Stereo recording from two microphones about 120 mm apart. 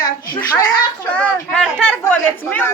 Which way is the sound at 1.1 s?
10° left (ahead or behind).